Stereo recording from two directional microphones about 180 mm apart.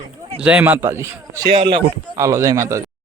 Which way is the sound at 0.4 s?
10° right (ahead or behind).